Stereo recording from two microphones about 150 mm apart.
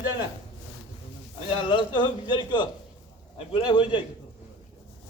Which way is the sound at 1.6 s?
30° left (ahead or behind).